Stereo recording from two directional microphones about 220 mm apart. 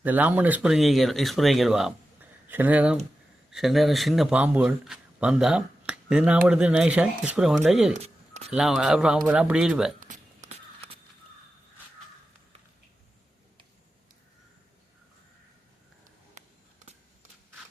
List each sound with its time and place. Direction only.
0.0 s a man's voice: 5° right (ahead or behind)
7.9 s a sound: 30° right (ahead or behind)
8.5 s speech: centre (ahead or behind)
10.0 s walk: 35° right (ahead or behind)